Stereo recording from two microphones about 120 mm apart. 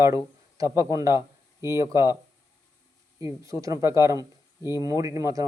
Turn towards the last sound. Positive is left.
turn(degrees=-25)  # may be behind; listen again after turning